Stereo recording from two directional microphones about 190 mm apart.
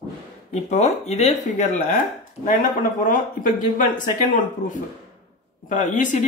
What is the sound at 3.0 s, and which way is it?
Speech, 45° left (ahead or behind).